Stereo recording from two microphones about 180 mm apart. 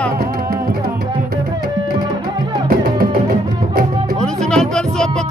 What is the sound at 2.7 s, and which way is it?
Music, 55° right (ahead or behind).